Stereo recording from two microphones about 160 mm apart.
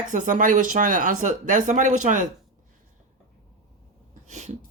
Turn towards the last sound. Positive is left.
turn(degrees=-45)  # may be behind; listen again after turning